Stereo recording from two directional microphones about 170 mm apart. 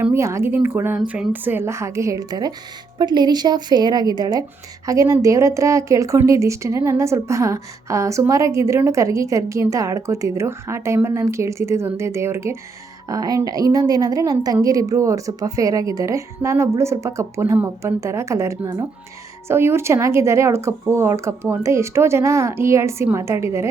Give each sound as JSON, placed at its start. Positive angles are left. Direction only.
{"t": 0.0, "sound": "a woman's voice", "side_deg": -15}